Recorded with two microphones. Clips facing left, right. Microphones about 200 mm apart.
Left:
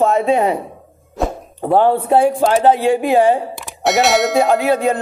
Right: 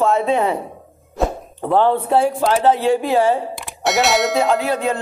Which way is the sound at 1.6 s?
15° left (ahead or behind).